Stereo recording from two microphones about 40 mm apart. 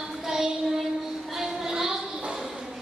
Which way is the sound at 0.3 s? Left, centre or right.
Centre.